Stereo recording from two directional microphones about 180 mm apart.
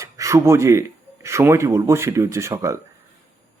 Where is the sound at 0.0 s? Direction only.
15° right (ahead or behind).